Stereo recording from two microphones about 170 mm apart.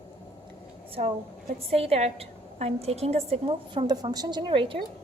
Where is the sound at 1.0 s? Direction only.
40° right (ahead or behind).